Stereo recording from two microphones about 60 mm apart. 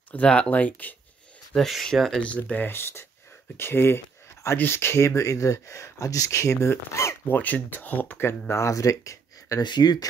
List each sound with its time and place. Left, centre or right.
0.1 s speech: centre
1.7 s speech: centre
2.1 s speech: left
2.7 s speech: left
7.2 s speech: left